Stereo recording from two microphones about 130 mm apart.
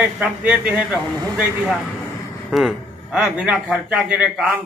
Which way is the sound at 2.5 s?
5° right (ahead or behind).